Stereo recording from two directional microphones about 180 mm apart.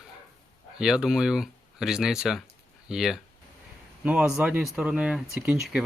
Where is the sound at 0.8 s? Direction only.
5° right (ahead or behind).